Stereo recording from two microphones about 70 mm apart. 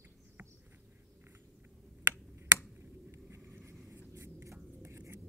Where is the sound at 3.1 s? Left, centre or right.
Right.